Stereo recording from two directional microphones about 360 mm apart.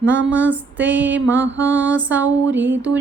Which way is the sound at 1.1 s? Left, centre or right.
Right.